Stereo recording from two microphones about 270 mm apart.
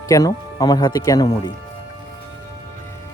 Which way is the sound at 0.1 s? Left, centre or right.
Centre.